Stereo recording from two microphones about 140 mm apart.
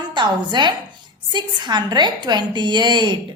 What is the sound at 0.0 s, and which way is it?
A woman's voice, 35° right (ahead or behind).